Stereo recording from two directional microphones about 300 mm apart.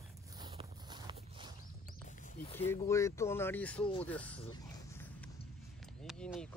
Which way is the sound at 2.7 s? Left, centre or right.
Centre.